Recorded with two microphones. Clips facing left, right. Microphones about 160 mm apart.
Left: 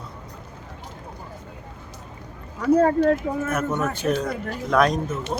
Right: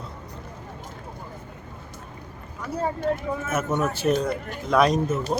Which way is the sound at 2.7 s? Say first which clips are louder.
Left 7 dB; 70° left (ahead or behind).